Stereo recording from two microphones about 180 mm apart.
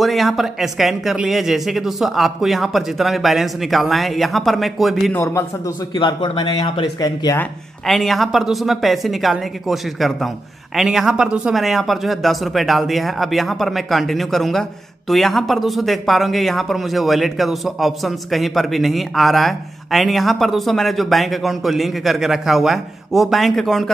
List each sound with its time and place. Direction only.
0.0 s speech: centre (ahead or behind)
5.1 s a man's voice: 15° left (ahead or behind)
5.9 s speech: 25° left (ahead or behind)
7.3 s speech: centre (ahead or behind)